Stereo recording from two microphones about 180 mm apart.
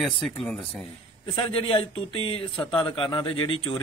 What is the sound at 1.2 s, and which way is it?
A man's voice, 30° left (ahead or behind).